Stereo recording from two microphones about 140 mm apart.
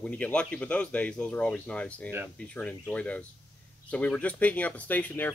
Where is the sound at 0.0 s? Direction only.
10° left (ahead or behind).